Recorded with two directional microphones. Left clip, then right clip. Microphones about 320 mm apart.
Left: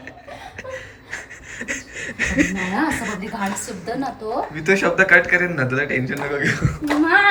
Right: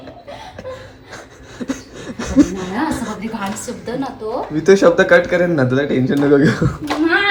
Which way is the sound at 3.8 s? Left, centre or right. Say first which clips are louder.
Right 2 dB; centre.